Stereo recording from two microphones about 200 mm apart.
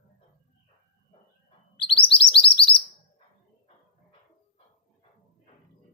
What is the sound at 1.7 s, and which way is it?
Chirp, 25° left (ahead or behind).